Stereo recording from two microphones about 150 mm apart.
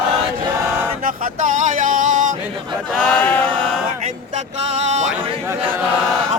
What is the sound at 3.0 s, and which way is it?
Chant, 5° left (ahead or behind).